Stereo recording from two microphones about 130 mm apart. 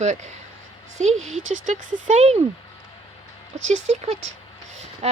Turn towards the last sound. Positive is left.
turn(degrees=-55)  # may be behind; listen again after turning